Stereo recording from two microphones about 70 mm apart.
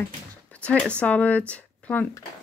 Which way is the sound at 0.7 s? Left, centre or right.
Centre.